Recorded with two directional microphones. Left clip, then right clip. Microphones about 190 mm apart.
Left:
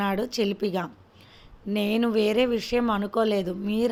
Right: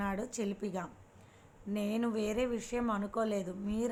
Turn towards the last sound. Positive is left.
turn(degrees=60)  # may be behind; listen again after turning